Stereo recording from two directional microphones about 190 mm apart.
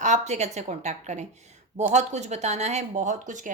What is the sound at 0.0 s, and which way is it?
A woman's voice, 40° right (ahead or behind).